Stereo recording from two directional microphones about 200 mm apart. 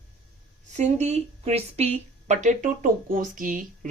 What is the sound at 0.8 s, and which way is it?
Speech, 35° right (ahead or behind).